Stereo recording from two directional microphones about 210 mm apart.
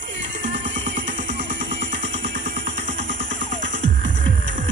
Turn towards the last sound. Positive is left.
turn(degrees=-60)  # may be behind; listen again after turning